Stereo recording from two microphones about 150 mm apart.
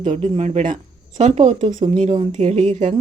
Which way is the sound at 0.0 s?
50° right (ahead or behind).